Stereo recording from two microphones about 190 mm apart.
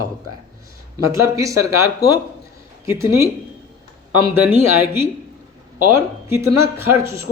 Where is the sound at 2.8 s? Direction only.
15° right (ahead or behind).